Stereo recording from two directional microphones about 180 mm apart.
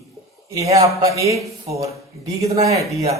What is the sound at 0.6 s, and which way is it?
Speech, 20° right (ahead or behind).